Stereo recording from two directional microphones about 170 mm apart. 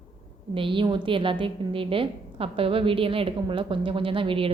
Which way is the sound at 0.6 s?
30° right (ahead or behind).